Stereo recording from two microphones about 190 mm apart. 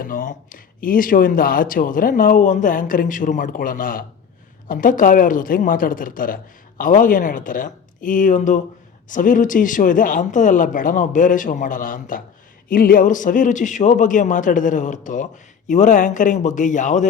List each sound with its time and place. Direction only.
0.0 s a man's voice: 45° left (ahead or behind)